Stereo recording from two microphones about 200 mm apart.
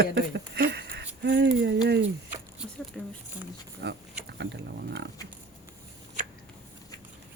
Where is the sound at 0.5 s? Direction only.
55° right (ahead or behind).